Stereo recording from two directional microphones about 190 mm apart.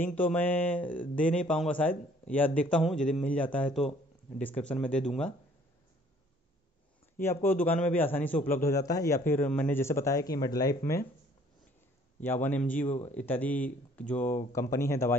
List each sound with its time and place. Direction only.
0.0 s a man's voice: 10° left (ahead or behind)
7.2 s speech: 10° left (ahead or behind)
12.3 s speech: 10° left (ahead or behind)